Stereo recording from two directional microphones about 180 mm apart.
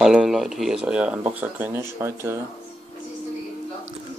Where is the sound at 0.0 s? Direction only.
Centre (ahead or behind).